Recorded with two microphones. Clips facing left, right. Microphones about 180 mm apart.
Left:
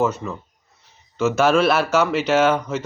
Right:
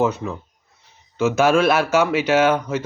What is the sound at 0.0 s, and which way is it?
Speech, 15° right (ahead or behind).